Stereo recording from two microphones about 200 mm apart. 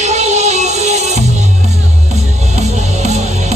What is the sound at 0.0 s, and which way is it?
Music, 35° right (ahead or behind).